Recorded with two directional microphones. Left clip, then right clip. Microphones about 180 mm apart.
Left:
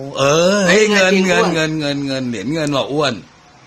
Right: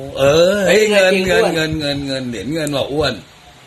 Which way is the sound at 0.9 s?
30° left (ahead or behind).